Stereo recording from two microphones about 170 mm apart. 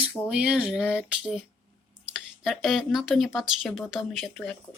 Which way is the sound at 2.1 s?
Centre (ahead or behind).